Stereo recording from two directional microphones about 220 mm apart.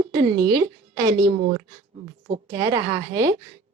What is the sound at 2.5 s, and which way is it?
Speech, 15° right (ahead or behind).